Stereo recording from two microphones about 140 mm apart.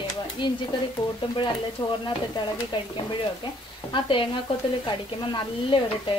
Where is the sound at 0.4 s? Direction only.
35° left (ahead or behind).